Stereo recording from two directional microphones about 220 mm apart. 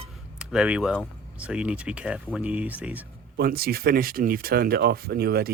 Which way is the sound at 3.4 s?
45° right (ahead or behind).